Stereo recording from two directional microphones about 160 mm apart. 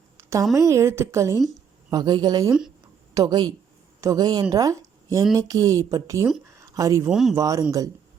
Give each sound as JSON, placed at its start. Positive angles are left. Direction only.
{"t": 0.2, "sound": "a sound", "side_deg": -15}
{"t": 0.5, "sound": "speech", "side_deg": -20}
{"t": 2.5, "sound": "speech", "side_deg": -5}
{"t": 3.2, "sound": "a woman's voice", "side_deg": -25}
{"t": 7.1, "sound": "speech", "side_deg": -5}
{"t": 7.3, "sound": "speech", "side_deg": -20}